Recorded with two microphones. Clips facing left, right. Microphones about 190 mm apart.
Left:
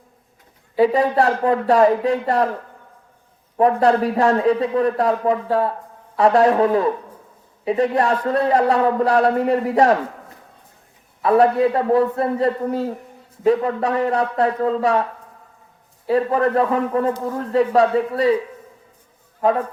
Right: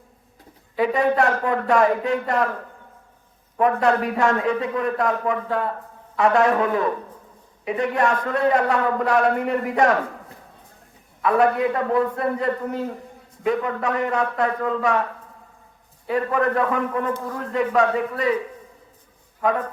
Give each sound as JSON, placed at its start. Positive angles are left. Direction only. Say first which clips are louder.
{"t": 0.8, "sound": "a man's voice", "louder": "left 3 dB", "side_deg": 35}
{"t": 3.6, "sound": "a man's voice", "louder": "left 4 dB", "side_deg": 35}
{"t": 11.2, "sound": "a man's voice", "louder": "left 4 dB", "side_deg": 35}
{"t": 16.0, "sound": "a man's voice", "louder": "left 4 dB", "side_deg": 30}
{"t": 19.4, "sound": "a man's voice", "louder": "left 4 dB", "side_deg": 30}